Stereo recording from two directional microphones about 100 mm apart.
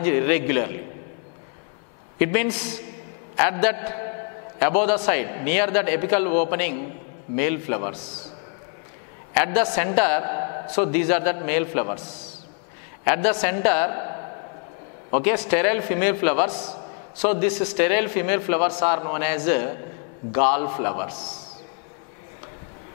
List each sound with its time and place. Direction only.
0.0 s a man's voice: 10° left (ahead or behind)
2.1 s a man's voice: 10° left (ahead or behind)
9.3 s a man's voice: 10° left (ahead or behind)
13.0 s a man's voice: 10° left (ahead or behind)